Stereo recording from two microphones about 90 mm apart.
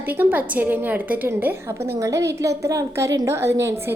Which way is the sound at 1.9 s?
35° right (ahead or behind).